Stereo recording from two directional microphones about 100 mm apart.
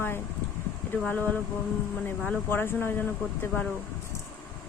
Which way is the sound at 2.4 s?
20° left (ahead or behind).